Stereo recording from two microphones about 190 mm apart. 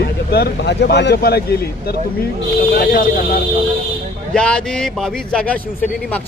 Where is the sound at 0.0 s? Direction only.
55° left (ahead or behind).